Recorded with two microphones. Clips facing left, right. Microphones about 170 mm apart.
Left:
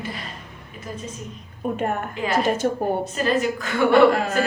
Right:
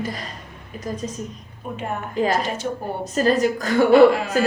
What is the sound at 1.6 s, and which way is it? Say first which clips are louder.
Speech: left 6 dB; 50° left (ahead or behind).